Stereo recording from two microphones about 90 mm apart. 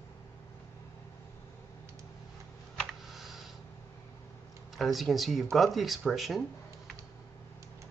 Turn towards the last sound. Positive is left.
turn(degrees=0)  # may be behind; listen again after turning